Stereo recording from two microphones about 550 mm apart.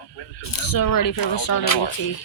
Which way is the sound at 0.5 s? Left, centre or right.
Left.